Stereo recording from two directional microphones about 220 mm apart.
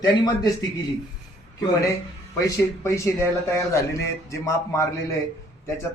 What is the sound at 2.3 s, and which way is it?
Speech, 15° left (ahead or behind).